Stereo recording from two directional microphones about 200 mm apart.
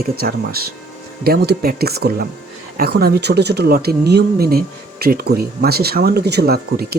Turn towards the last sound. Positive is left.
turn(degrees=-55)  # may be behind; listen again after turning